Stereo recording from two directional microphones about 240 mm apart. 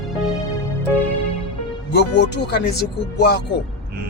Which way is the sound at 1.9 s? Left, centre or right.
Left.